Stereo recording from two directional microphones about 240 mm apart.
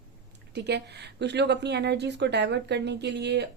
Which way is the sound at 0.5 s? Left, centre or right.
Right.